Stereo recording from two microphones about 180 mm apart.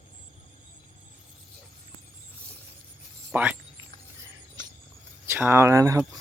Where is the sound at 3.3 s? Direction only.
10° right (ahead or behind).